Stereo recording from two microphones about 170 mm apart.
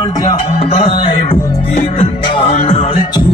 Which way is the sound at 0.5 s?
35° left (ahead or behind).